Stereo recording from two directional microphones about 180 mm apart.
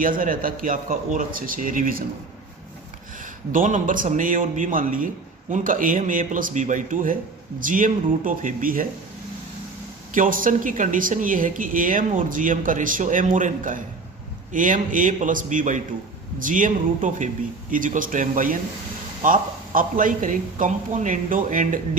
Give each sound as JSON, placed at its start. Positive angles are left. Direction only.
{"t": 0.0, "sound": "speech", "side_deg": -50}
{"t": 3.5, "sound": "speech", "side_deg": -50}
{"t": 10.2, "sound": "speech", "side_deg": -50}